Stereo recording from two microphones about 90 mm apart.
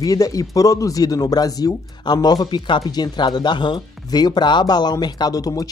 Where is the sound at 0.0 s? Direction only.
40° left (ahead or behind).